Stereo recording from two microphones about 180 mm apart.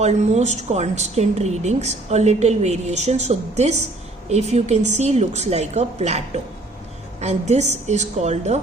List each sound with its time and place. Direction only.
0.0 s a woman's voice: 40° right (ahead or behind)